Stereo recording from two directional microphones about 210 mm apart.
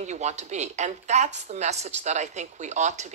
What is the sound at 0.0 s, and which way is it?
A woman's voice, 35° right (ahead or behind).